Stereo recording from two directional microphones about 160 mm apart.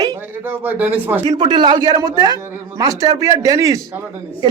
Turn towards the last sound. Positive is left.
turn(degrees=-20)  # may be behind; listen again after turning